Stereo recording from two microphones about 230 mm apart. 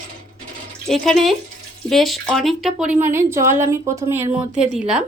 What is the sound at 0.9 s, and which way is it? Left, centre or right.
Speech, centre.